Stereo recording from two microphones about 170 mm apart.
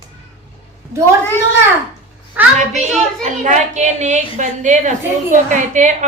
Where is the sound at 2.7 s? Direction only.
40° right (ahead or behind).